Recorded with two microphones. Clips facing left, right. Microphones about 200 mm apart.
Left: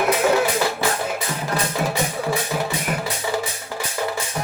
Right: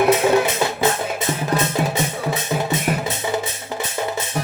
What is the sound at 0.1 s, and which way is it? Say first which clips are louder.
Music: right 2 dB; 25° right (ahead or behind).